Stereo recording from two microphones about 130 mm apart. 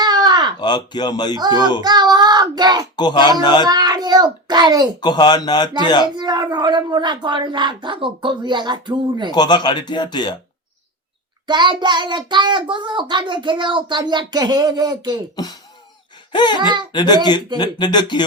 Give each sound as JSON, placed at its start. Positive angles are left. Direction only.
{"t": 0.0, "sound": "a sound", "side_deg": -30}
{"t": 0.6, "sound": "speech", "side_deg": 35}
{"t": 1.8, "sound": "child singing", "side_deg": -30}
{"t": 2.9, "sound": "speech", "side_deg": 35}
{"t": 3.6, "sound": "a child's voice", "side_deg": -30}
{"t": 4.9, "sound": "speech", "side_deg": 35}
{"t": 6.1, "sound": "a child's voice", "side_deg": -30}
{"t": 9.3, "sound": "speech", "side_deg": 35}
{"t": 11.4, "sound": "a child's voice", "side_deg": -35}
{"t": 16.3, "sound": "speech", "side_deg": 35}
{"t": 16.6, "sound": "a child's voice", "side_deg": -35}
{"t": 16.9, "sound": "speech", "side_deg": 35}